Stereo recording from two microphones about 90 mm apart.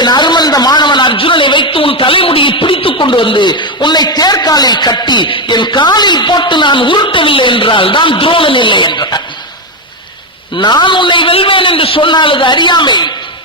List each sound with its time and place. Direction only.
0.0 s a man's voice: 55° left (ahead or behind)
10.6 s a man's voice: 55° left (ahead or behind)